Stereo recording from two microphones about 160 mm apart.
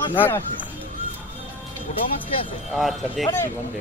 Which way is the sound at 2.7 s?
Centre (ahead or behind).